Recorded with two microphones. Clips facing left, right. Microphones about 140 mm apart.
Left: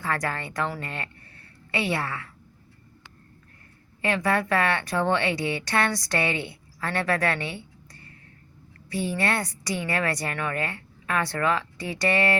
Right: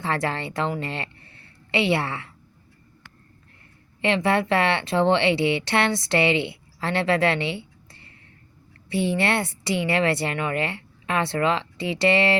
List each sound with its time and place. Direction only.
0.0 s a woman's voice: 25° right (ahead or behind)
4.0 s a woman's voice: 25° right (ahead or behind)